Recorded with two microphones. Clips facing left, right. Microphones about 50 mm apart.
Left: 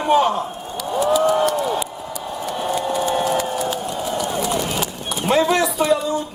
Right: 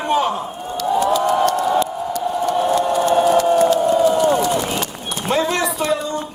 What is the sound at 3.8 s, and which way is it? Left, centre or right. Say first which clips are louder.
Run: right 11 dB; right.